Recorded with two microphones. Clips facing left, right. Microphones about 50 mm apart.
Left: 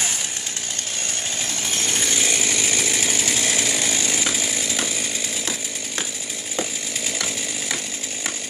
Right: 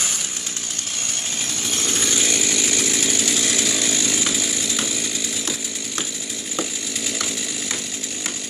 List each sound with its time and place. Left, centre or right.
2.2 s chainsaw: left